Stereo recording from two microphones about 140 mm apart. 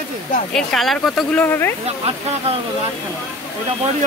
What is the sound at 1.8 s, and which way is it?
Speech, 45° right (ahead or behind).